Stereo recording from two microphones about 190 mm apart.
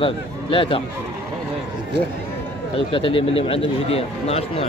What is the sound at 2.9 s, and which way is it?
Speech, 25° left (ahead or behind).